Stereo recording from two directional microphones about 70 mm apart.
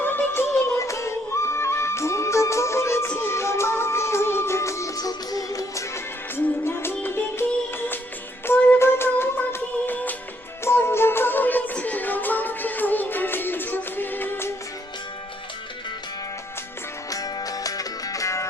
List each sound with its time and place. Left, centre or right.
0.0 s music: left
0.8 s music: left
6.3 s music: left
10.6 s music: left
17.1 s music: left